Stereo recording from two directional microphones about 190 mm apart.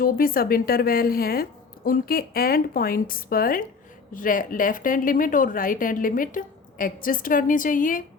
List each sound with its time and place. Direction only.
0.0 s speech: 50° left (ahead or behind)